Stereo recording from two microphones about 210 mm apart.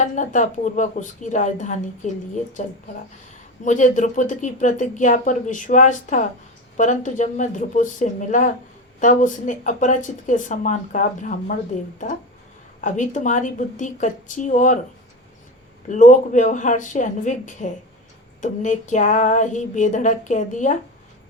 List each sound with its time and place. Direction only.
0.0 s speech: 35° left (ahead or behind)
12.8 s speech: 35° left (ahead or behind)
15.9 s speech: 35° left (ahead or behind)